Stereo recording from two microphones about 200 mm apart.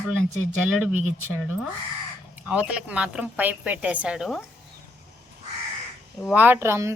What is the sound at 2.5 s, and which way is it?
Speech, 5° right (ahead or behind).